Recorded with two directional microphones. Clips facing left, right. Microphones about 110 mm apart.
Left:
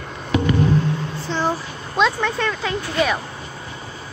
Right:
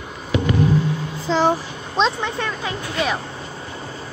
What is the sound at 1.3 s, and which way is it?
Speech, 90° right.